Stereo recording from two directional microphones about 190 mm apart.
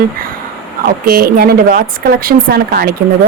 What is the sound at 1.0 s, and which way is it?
Speech, 50° right (ahead or behind).